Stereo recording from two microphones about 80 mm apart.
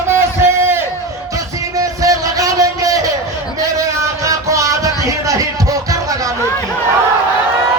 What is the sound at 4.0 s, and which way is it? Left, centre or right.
Music, right.